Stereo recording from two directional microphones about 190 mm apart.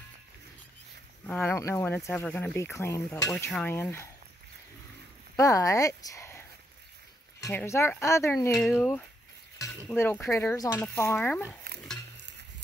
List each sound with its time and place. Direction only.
1.2 s speech: 10° left (ahead or behind)
5.3 s speech: 15° left (ahead or behind)
7.5 s speech: 15° left (ahead or behind)
8.5 s speech: centre (ahead or behind)
9.8 s speech: 10° left (ahead or behind)